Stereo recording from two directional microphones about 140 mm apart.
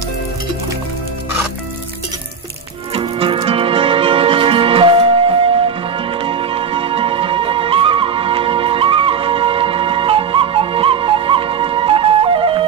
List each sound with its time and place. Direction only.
2.9 s music: 40° right (ahead or behind)